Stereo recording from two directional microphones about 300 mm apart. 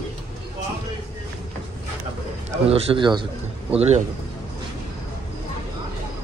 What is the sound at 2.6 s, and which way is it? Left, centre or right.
A man's voice, centre.